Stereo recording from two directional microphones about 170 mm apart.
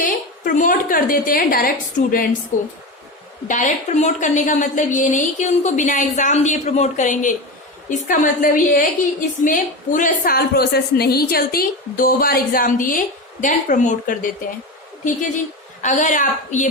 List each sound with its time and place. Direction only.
0.0 s a woman's voice: 50° left (ahead or behind)
15.8 s a woman's voice: 45° left (ahead or behind)